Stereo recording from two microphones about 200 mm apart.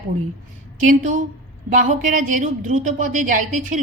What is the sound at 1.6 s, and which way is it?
A woman's voice, 40° right (ahead or behind).